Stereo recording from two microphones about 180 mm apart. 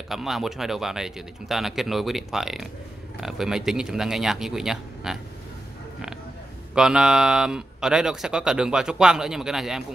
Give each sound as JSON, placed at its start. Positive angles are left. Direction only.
{"t": 0.1, "sound": "speech", "side_deg": 0}
{"t": 6.7, "sound": "speech", "side_deg": -5}